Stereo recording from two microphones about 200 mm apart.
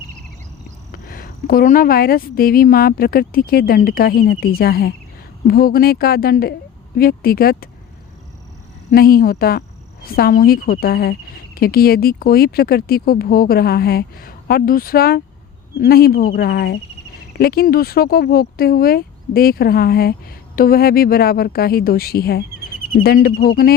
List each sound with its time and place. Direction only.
0.9 s speech: 45° left (ahead or behind)
8.9 s speech: 45° left (ahead or behind)